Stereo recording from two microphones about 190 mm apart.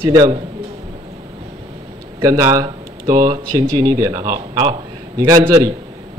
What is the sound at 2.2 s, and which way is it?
A man's voice, 20° right (ahead or behind).